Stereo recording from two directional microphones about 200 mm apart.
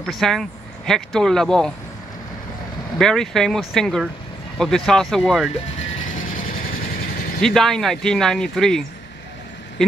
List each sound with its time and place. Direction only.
0.0 s speech: centre (ahead or behind)
3.0 s speech: centre (ahead or behind)
6.3 s vehicle: 45° left (ahead or behind)
7.4 s speech: centre (ahead or behind)
9.8 s a sound: centre (ahead or behind)